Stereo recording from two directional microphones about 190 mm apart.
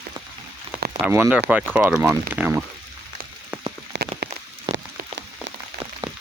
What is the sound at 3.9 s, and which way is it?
Rain on surface, 55° right (ahead or behind).